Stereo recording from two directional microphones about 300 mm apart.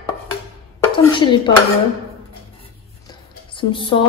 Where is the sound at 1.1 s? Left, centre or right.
Centre.